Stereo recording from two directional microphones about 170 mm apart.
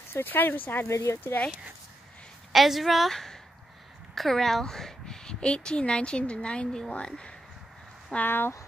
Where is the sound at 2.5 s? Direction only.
Centre (ahead or behind).